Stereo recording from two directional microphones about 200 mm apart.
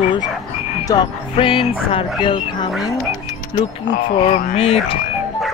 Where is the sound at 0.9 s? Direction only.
25° left (ahead or behind).